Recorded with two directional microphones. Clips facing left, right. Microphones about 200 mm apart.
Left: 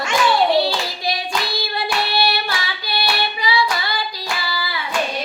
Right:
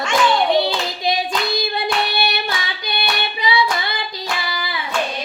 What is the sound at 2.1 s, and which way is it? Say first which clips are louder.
Singing: left 2 dB; 20° right (ahead or behind).